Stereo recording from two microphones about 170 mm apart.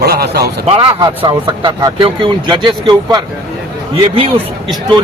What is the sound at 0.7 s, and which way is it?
A man's voice, 30° right (ahead or behind).